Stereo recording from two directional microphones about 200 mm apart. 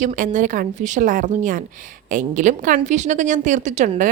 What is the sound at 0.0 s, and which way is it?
A woman's voice, 40° right (ahead or behind).